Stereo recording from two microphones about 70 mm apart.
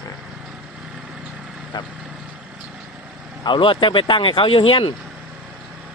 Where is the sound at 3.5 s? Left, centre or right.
Left.